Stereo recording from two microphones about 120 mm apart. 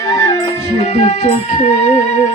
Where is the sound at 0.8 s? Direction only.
70° left (ahead or behind).